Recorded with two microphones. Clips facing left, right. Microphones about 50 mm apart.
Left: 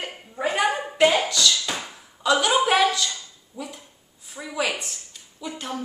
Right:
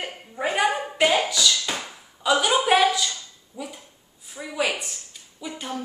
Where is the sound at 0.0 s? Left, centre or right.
Centre.